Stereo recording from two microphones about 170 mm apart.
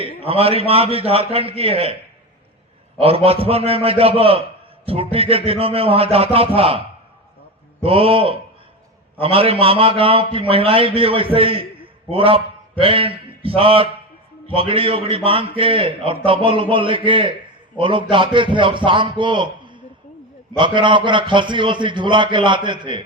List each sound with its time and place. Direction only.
0.3 s a man's voice: 35° right (ahead or behind)
3.0 s a man's voice: 35° right (ahead or behind)